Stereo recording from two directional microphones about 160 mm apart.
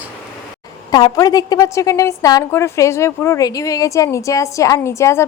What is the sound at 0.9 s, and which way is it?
A woman's voice, 25° left (ahead or behind).